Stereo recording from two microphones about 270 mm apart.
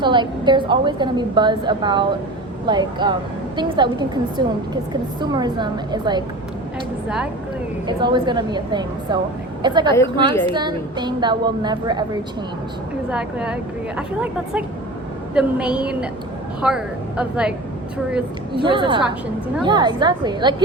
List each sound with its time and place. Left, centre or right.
0.0 s a woman's voice: centre
7.9 s a woman's voice: centre
13.1 s speech: centre
18.5 s a woman's voice: centre